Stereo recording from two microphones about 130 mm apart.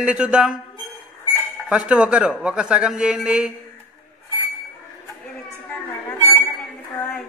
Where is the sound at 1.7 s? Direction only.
10° right (ahead or behind).